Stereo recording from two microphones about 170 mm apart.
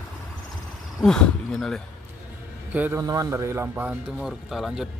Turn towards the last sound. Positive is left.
turn(degrees=0)  # may be behind; listen again after turning